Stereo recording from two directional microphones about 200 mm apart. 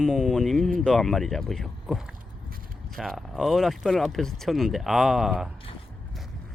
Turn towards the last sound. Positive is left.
turn(degrees=0)  # may be behind; listen again after turning